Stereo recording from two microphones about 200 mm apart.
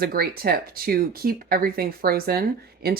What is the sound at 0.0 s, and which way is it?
Speech, 50° right (ahead or behind).